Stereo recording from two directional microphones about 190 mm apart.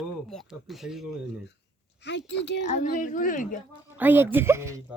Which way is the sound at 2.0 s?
65° left (ahead or behind).